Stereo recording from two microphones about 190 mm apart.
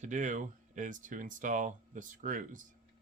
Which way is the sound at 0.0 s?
40° right (ahead or behind).